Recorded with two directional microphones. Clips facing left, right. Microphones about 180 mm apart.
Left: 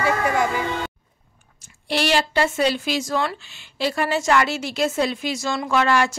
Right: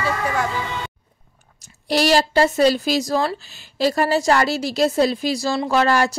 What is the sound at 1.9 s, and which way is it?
A woman's voice, 40° right (ahead or behind).